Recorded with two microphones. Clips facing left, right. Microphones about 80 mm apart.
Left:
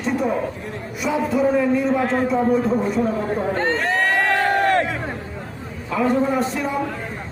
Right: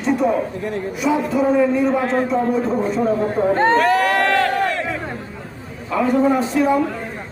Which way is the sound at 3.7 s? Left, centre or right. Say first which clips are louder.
Right 5 dB; right.